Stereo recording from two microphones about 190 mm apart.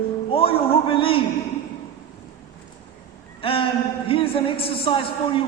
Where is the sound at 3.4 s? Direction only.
30° left (ahead or behind).